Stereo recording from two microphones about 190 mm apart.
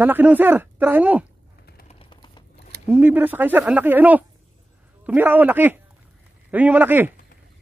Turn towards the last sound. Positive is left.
turn(degrees=-10)  # may be behind; listen again after turning